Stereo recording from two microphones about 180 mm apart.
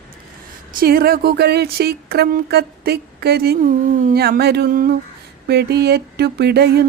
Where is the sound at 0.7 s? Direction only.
55° right (ahead or behind).